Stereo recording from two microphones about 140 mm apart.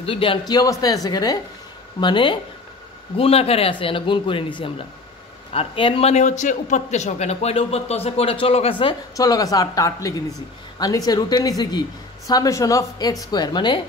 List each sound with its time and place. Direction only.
0.0 s a woman's voice: 40° left (ahead or behind)
3.2 s a man's voice: 45° left (ahead or behind)
9.1 s a woman's voice: 25° left (ahead or behind)